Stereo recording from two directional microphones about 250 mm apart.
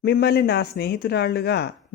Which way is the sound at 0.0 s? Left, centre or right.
Left.